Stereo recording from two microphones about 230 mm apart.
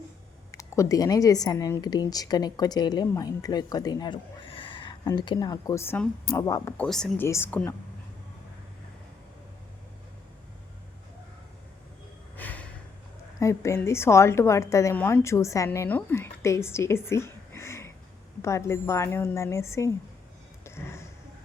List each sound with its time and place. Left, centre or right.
0.5 s speech: centre
6.8 s speech: centre
12.4 s snort: centre
13.4 s speech: centre
20.7 s a sound: centre